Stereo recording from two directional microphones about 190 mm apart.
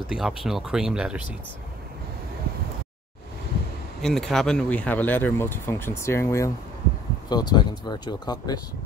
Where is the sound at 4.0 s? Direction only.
Centre (ahead or behind); by 8.6 s 20° left (ahead or behind).